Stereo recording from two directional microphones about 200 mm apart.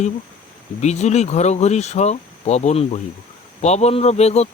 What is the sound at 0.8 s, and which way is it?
Speech, 35° left (ahead or behind).